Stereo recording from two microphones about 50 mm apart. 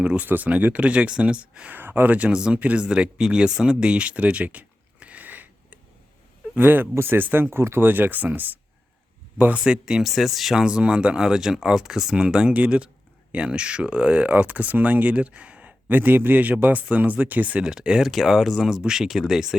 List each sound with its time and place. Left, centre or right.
0.0 s speech: right
1.7 s speech: right
2.1 s speech: right
7.9 s speech: right
9.6 s speech: centre
10.0 s speech: centre; by 17.6 s right
17.6 s speech: centre
18.1 s speech: centre